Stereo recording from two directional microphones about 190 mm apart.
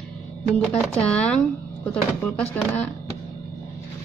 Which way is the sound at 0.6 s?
5° left (ahead or behind).